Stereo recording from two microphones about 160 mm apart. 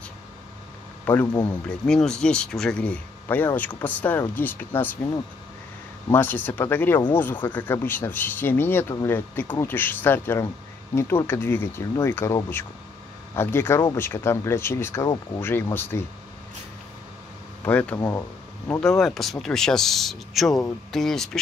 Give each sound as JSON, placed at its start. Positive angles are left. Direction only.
{"t": 1.9, "sound": "speech", "side_deg": 5}
{"t": 17.6, "sound": "speech", "side_deg": 10}